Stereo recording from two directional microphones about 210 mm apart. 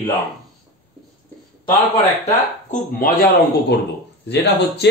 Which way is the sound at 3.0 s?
45° left (ahead or behind).